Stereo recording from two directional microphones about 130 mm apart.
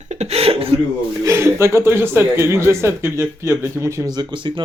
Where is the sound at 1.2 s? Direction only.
20° right (ahead or behind).